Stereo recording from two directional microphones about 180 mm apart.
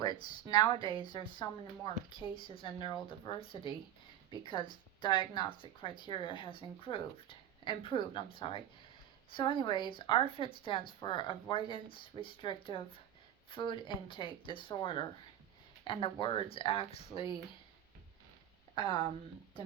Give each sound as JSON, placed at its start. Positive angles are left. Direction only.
{"t": 0.4, "sound": "speech", "side_deg": 25}
{"t": 18.7, "sound": "a woman's voice", "side_deg": 25}